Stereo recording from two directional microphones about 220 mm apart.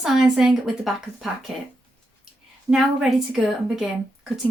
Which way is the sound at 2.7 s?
Centre (ahead or behind).